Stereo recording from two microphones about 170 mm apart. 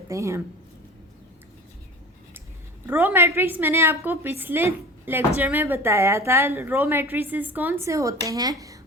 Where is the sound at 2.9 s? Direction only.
10° right (ahead or behind).